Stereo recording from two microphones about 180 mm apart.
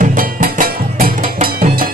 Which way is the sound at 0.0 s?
50° right (ahead or behind).